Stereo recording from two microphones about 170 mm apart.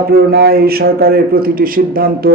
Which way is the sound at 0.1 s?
65° right (ahead or behind).